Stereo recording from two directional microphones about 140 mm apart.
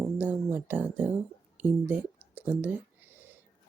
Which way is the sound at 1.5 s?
10° right (ahead or behind).